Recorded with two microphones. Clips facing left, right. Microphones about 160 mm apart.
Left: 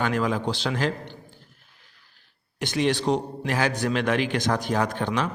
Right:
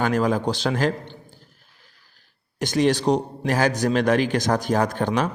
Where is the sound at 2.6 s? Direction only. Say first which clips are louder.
Right 4 dB; 40° right (ahead or behind).